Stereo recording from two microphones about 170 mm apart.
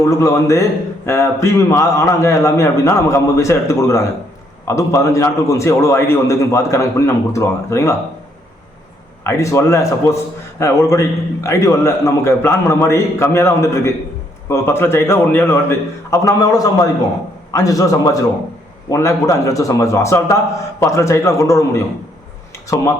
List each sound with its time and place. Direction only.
0.0 s a man's voice: 20° left (ahead or behind)
9.2 s a man's voice: 15° left (ahead or behind)